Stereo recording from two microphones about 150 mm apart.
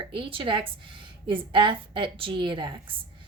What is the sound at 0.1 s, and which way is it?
A woman's voice, 35° right (ahead or behind).